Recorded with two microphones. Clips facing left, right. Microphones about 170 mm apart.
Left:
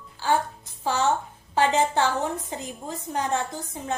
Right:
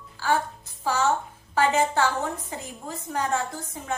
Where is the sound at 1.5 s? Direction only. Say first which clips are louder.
Left 1 dB; 20° left (ahead or behind).